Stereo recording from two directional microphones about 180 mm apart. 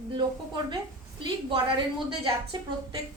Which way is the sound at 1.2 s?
25° right (ahead or behind).